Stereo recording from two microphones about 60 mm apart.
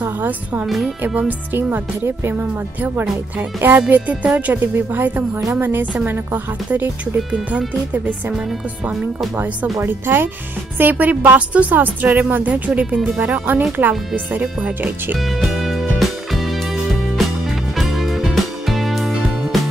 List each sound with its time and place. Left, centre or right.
1.0 s speech: right
1.7 s speech: right
2.8 s speech: right
7.5 s speech: centre
9.8 s speech: right
15.1 s music: centre
17.7 s music: centre